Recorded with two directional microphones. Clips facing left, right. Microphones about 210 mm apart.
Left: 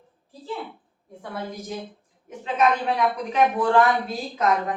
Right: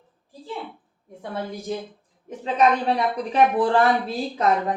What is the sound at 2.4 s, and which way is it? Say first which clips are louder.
A woman's voice: right 2 dB; 35° right (ahead or behind).